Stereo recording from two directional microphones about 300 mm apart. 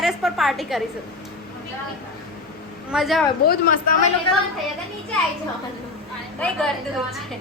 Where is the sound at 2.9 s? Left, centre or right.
Centre.